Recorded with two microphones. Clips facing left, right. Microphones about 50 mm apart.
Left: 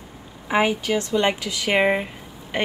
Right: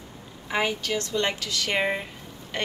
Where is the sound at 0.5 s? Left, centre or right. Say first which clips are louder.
Left 6 dB; centre.